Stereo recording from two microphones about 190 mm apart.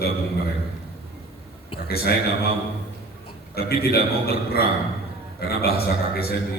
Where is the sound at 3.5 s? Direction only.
55° left (ahead or behind).